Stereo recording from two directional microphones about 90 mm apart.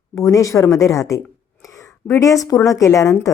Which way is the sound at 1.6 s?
35° left (ahead or behind).